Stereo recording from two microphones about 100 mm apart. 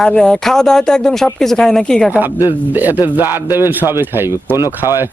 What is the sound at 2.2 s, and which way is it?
A man's voice, 20° right (ahead or behind).